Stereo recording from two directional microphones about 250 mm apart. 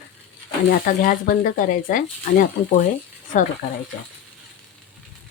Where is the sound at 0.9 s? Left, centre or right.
Left.